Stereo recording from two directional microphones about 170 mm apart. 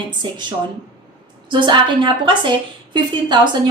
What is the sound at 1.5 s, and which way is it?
Speech, 25° right (ahead or behind).